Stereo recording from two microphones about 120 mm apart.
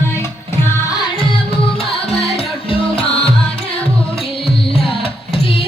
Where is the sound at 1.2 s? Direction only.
50° left (ahead or behind).